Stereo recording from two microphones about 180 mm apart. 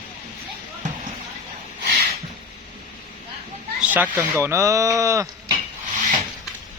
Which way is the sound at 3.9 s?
10° right (ahead or behind).